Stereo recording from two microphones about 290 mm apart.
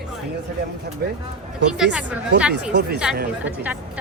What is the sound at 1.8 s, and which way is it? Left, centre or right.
A woman's voice, centre.